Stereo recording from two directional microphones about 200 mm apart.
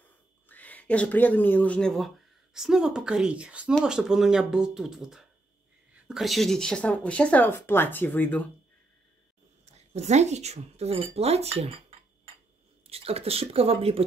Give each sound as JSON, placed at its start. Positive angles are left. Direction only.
{"t": 0.5, "sound": "speech", "side_deg": 10}
{"t": 9.8, "sound": "speech", "side_deg": -35}
{"t": 12.8, "sound": "speech", "side_deg": -30}